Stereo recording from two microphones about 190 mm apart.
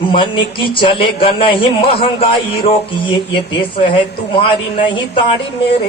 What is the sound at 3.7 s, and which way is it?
Speech, 30° left (ahead or behind).